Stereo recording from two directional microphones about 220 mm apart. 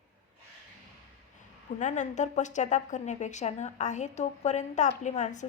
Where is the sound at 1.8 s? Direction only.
35° left (ahead or behind).